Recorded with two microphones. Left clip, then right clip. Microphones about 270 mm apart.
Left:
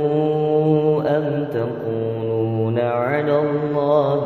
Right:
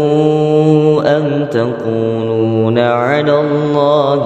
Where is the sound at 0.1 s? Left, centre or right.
Right.